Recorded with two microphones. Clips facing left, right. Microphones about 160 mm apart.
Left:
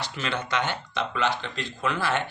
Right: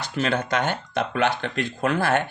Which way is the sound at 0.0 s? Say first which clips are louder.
Right 6 dB; 45° right (ahead or behind).